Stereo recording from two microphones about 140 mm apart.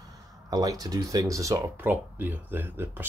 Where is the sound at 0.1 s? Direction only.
25° right (ahead or behind).